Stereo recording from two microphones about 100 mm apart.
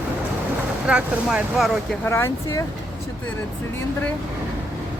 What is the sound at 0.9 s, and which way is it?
Speech, 10° right (ahead or behind).